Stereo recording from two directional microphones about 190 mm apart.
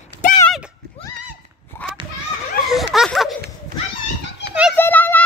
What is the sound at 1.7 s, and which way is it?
Children playing, 10° left (ahead or behind).